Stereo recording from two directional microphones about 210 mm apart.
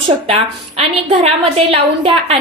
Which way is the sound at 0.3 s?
30° right (ahead or behind).